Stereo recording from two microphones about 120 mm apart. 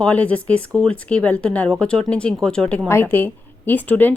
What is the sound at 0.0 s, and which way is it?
A woman's voice, 10° left (ahead or behind).